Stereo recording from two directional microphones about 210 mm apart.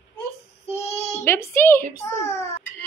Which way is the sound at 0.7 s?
30° left (ahead or behind).